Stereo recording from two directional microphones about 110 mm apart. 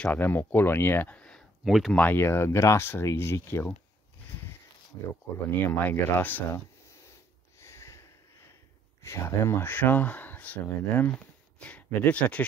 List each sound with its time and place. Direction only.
0.0 s speech: 15° left (ahead or behind)
1.6 s speech: 5° right (ahead or behind)
2.0 s speech: 20° left (ahead or behind)
5.5 s speech: 15° left (ahead or behind)
7.6 s a sound: 25° left (ahead or behind)
9.0 s speech: 25° left (ahead or behind)